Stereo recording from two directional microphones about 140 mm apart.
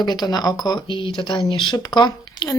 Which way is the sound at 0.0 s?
30° left (ahead or behind).